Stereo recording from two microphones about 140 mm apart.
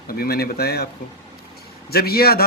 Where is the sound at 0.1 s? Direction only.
90° left.